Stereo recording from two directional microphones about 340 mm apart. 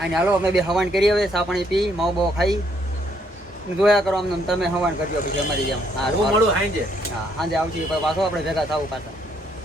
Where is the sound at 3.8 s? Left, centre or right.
Centre.